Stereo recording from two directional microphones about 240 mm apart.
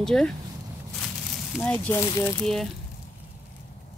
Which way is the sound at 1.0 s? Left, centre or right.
Centre.